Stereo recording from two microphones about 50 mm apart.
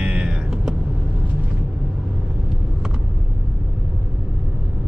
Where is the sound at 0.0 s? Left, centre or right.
Right.